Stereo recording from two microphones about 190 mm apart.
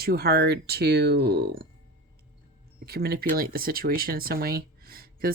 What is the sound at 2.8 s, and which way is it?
Speech, 55° right (ahead or behind).